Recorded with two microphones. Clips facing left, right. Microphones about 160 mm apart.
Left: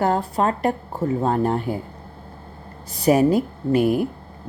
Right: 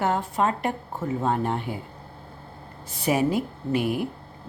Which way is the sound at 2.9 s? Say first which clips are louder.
Left 7 dB; 40° left (ahead or behind).